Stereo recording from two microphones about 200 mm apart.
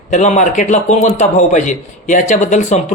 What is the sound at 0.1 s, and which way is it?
A man's voice, 35° left (ahead or behind).